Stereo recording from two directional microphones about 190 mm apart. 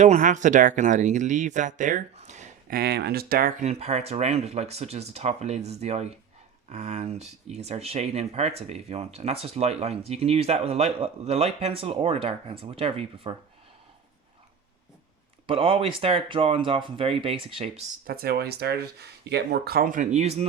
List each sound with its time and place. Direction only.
0.0 s speech: 40° right (ahead or behind)
2.7 s speech: 55° right (ahead or behind)
3.6 s speech: 35° right (ahead or behind)
15.4 s speech: 30° right (ahead or behind)
18.0 s speech: 50° right (ahead or behind); by 20.5 s 35° right (ahead or behind)